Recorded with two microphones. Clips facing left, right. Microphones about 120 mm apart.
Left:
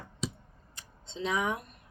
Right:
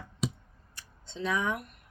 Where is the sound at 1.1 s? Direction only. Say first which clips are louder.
Even; 20° left (ahead or behind).